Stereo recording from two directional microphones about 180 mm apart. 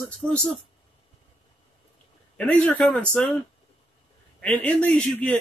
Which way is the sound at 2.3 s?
10° left (ahead or behind).